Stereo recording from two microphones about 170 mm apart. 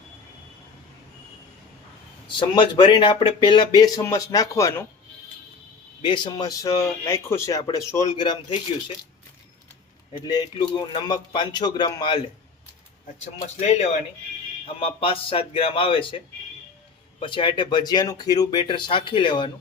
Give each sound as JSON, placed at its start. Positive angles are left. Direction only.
{"t": 2.2, "sound": "speech", "side_deg": 30}
{"t": 6.0, "sound": "speech", "side_deg": 25}
{"t": 10.1, "sound": "speech", "side_deg": 25}
{"t": 13.6, "sound": "speech", "side_deg": 40}
{"t": 17.2, "sound": "speech", "side_deg": 30}